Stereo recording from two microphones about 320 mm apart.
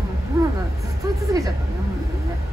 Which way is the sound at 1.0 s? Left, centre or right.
Centre.